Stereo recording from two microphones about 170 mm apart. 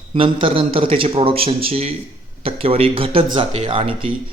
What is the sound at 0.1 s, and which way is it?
Speech, 30° right (ahead or behind).